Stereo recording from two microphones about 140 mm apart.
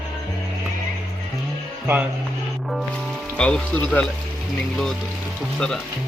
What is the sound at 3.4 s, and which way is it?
Speech, 10° left (ahead or behind).